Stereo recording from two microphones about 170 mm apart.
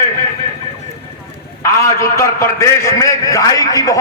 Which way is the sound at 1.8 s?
15° left (ahead or behind).